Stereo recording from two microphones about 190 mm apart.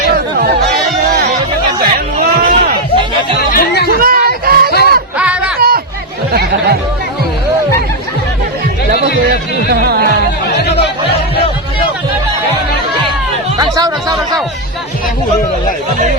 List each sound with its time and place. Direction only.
1.8 s chatter: 50° right (ahead or behind)
3.5 s music: 50° left (ahead or behind)
3.9 s a sound: 50° right (ahead or behind)
4.7 s music: 55° left (ahead or behind)
5.1 s a sound: 5° right (ahead or behind)
5.5 s a sound: 50° right (ahead or behind)
9.6 s music: 55° right (ahead or behind)
10.6 s music: 60° left (ahead or behind)
13.6 s music: 20° right (ahead or behind)